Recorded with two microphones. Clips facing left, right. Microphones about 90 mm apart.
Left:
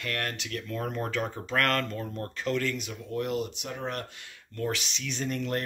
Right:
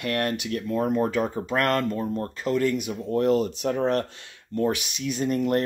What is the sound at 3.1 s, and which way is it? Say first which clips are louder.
Speech: right 9 dB; 40° right (ahead or behind).